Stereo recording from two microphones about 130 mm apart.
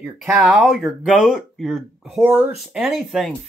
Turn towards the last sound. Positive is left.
turn(degrees=0)  # may be behind; listen again after turning